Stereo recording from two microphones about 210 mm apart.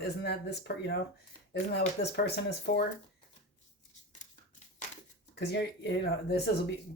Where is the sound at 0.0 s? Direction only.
50° left (ahead or behind).